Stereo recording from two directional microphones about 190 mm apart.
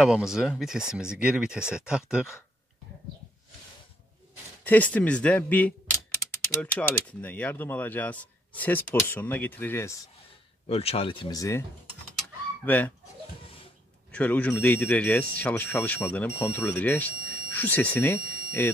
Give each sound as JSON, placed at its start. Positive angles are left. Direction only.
{"t": 0.0, "sound": "speech", "side_deg": -5}
{"t": 4.6, "sound": "speech", "side_deg": 10}
{"t": 10.7, "sound": "speech", "side_deg": 30}
{"t": 12.6, "sound": "speech", "side_deg": 10}
{"t": 14.1, "sound": "speech", "side_deg": 5}